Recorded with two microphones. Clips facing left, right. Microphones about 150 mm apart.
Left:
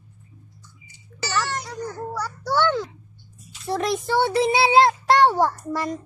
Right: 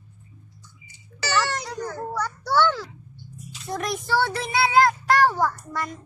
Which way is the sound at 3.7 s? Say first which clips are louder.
Left 3 dB; 25° left (ahead or behind).